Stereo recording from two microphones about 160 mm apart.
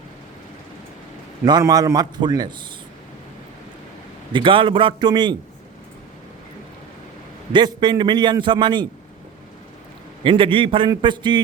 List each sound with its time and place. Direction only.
1.5 s a man's voice: 25° right (ahead or behind)
4.3 s a man's voice: 30° right (ahead or behind)
7.5 s a man's voice: 25° right (ahead or behind)
10.2 s a man's voice: 30° right (ahead or behind)